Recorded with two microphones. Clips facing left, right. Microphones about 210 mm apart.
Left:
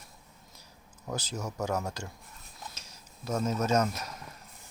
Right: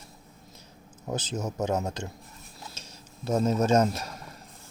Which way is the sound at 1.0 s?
20° right (ahead or behind).